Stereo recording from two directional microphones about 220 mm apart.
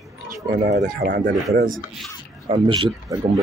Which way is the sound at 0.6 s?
35° right (ahead or behind).